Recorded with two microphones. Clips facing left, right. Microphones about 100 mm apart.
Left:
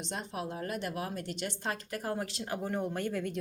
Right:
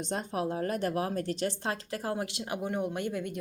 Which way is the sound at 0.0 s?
45° right (ahead or behind).